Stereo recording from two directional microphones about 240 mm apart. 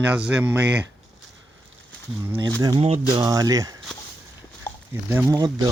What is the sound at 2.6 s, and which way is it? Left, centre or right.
Speech, centre.